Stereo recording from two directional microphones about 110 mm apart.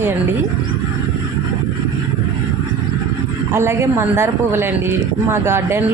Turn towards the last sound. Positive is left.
turn(degrees=-20)  # may be behind; listen again after turning